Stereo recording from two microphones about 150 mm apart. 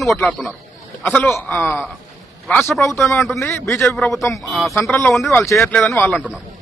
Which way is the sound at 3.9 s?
Centre (ahead or behind).